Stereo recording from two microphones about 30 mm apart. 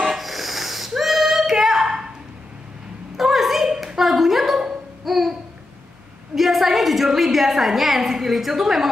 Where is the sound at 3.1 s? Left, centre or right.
Centre.